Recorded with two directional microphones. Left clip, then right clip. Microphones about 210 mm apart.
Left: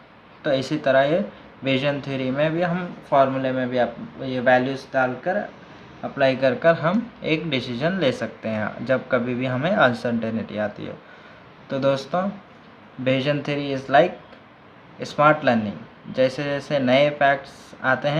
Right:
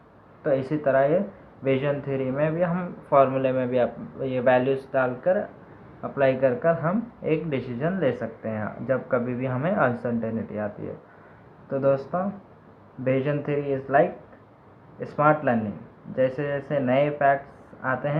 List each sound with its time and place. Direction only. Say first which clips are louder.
0.4 s speech: left 2 dB; 20° left (ahead or behind)
3.1 s a man's voice: left 1 dB; 10° left (ahead or behind)
6.6 s speech: left 5 dB; 25° left (ahead or behind)
11.7 s speech: left 1 dB; 25° left (ahead or behind)